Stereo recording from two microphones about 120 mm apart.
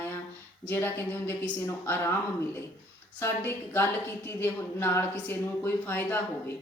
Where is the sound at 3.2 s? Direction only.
20° left (ahead or behind).